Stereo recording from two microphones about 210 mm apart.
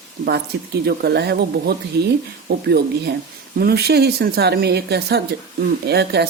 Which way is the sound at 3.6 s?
50° right (ahead or behind).